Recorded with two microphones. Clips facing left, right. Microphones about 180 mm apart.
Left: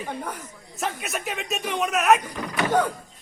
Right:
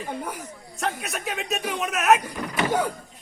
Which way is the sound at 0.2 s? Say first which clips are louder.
Right 1 dB; 10° right (ahead or behind).